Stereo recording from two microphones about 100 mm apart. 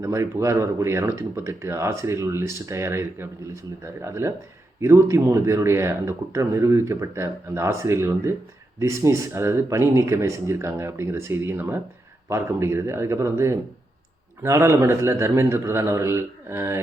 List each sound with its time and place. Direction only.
0.0 s speech: 30° right (ahead or behind)